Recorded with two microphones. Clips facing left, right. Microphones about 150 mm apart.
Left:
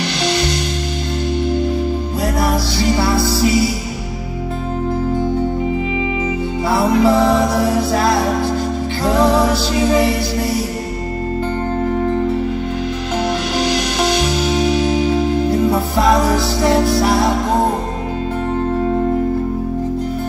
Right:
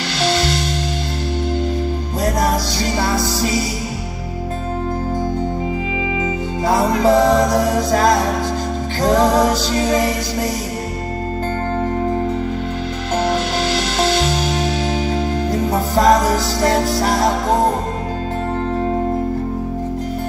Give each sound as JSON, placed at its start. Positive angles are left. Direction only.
{"t": 6.7, "sound": "music", "side_deg": -40}
{"t": 15.7, "sound": "music", "side_deg": -40}